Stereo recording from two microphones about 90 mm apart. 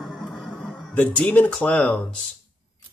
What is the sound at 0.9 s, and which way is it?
Speech, 15° left (ahead or behind).